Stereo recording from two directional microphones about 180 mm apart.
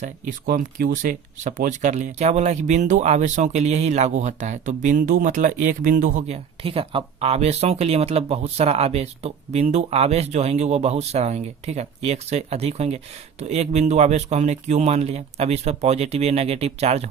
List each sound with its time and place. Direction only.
0.4 s speech: 55° right (ahead or behind); by 17.1 s 35° right (ahead or behind)